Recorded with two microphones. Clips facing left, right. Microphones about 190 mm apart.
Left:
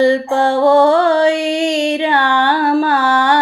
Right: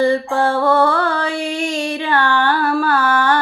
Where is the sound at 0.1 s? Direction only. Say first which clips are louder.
Left 3 dB; 20° left (ahead or behind).